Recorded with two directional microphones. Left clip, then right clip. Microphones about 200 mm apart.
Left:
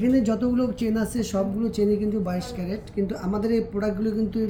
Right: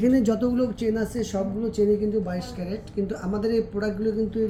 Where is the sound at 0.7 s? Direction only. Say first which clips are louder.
Right 1 dB; 25° left (ahead or behind).